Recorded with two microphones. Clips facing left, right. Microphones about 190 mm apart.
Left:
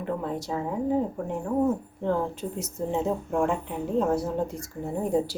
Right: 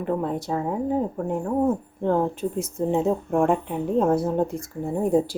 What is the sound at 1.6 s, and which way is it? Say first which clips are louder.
Speech: right 3 dB; 55° right (ahead or behind).